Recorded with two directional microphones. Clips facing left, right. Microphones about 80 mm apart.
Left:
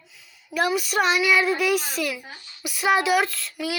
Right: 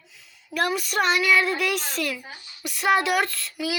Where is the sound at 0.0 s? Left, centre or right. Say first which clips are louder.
Left 1 dB; centre.